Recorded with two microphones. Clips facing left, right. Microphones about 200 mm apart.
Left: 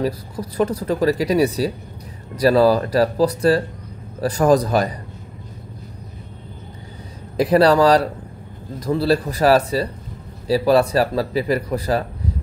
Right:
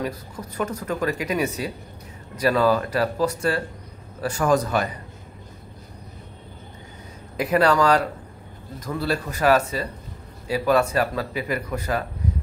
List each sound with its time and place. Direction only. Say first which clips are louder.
0.0 s speech: left 6 dB; 35° left (ahead or behind)
7.3 s speech: left 5 dB; 35° left (ahead or behind)